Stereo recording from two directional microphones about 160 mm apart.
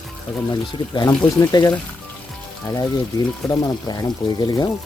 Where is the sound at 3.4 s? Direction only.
25° left (ahead or behind).